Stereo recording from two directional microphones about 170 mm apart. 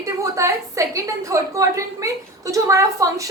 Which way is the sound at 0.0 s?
20° right (ahead or behind).